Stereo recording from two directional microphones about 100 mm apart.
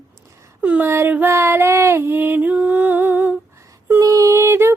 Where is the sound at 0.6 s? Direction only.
15° right (ahead or behind).